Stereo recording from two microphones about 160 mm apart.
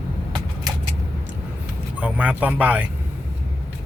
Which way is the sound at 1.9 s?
10° right (ahead or behind).